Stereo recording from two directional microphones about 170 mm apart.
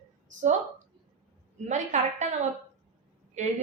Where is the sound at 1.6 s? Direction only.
45° right (ahead or behind).